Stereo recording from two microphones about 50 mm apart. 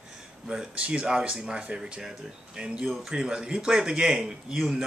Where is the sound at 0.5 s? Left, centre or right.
Centre.